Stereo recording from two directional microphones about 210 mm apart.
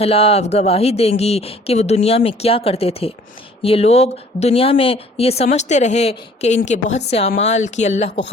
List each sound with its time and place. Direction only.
0.0 s speech: 25° left (ahead or behind)